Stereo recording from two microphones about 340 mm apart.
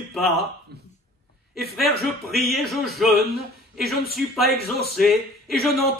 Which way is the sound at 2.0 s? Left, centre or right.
Centre.